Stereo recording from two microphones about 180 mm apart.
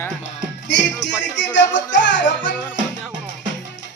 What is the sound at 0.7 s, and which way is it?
Music, 80° left.